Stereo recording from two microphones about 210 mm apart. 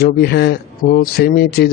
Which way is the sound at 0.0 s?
50° left (ahead or behind).